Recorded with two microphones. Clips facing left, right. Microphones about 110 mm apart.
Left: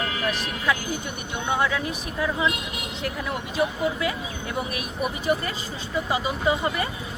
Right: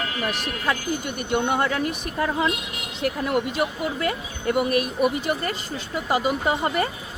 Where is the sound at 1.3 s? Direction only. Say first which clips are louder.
Right 3 dB; 55° right (ahead or behind).